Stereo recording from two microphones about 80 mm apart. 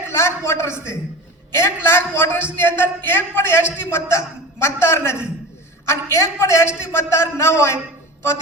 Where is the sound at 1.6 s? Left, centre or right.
Left.